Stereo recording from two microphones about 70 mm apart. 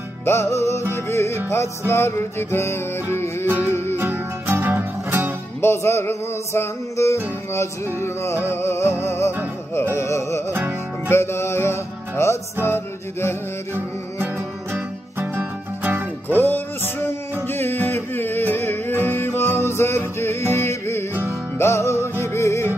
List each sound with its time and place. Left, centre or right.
0.2 s music: left
3.9 s music: right
5.6 s music: left
13.7 s music: right
16.3 s music: left